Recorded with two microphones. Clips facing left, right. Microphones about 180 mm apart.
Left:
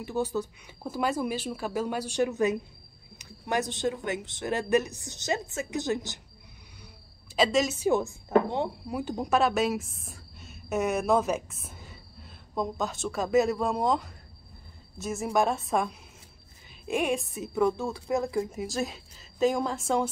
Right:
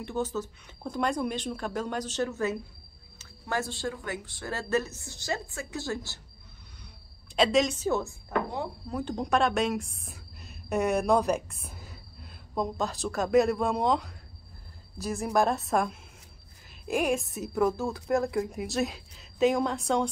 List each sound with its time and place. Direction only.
0.0 s speech: 10° left (ahead or behind)
7.3 s a woman's voice: centre (ahead or behind)
7.8 s speech: 15° left (ahead or behind)
8.8 s a woman's voice: 10° left (ahead or behind)